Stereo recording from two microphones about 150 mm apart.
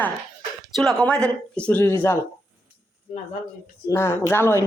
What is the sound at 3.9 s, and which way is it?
Speech, 15° left (ahead or behind).